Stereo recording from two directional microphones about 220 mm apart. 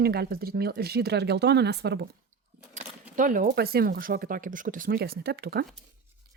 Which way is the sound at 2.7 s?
35° right (ahead or behind).